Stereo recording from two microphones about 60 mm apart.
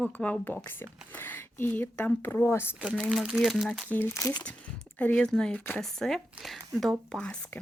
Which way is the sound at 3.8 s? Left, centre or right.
Left.